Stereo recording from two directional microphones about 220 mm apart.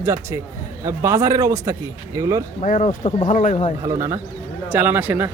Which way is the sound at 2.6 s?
35° left (ahead or behind).